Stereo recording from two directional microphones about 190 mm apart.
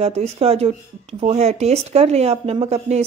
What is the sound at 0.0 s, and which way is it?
Speech, 35° right (ahead or behind).